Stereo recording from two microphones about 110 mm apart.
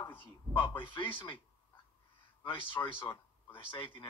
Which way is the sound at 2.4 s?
50° left (ahead or behind).